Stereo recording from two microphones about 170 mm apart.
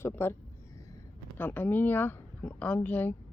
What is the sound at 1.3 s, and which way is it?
Speech, 10° left (ahead or behind).